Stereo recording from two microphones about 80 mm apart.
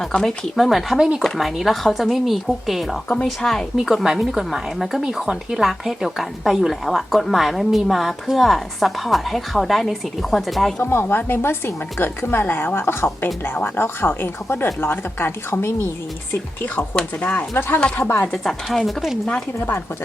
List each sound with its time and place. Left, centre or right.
0.2 s a woman's voice: centre
10.8 s speech: left
16.7 s speech: centre
18.4 s a woman's voice: centre